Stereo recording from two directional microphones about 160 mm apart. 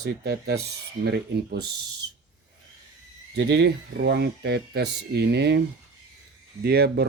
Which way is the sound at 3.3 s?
90° right.